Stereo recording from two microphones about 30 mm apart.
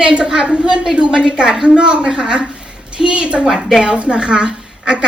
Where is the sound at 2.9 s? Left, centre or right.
Right.